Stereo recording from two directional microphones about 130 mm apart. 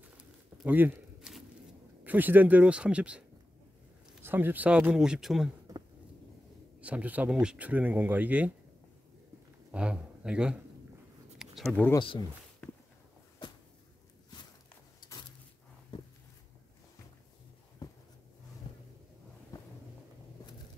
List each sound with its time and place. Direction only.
0.7 s speech: 15° right (ahead or behind)
2.0 s speech: 15° right (ahead or behind)
6.8 s speech: 10° right (ahead or behind)
9.7 s a man's voice: 10° right (ahead or behind)
11.3 s a sound: centre (ahead or behind)
15.0 s a sound: 35° left (ahead or behind)